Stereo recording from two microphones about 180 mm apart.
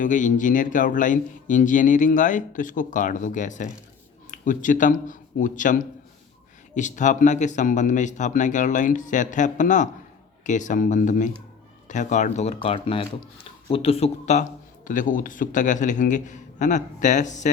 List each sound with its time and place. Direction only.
0.0 s a man's voice: 45° left (ahead or behind)